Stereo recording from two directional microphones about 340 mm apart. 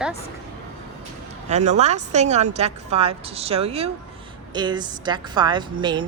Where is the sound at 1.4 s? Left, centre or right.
Centre.